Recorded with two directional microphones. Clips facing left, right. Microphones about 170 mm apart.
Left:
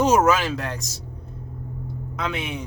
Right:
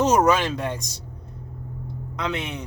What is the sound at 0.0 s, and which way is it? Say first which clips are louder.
Speech: even; 10° left (ahead or behind).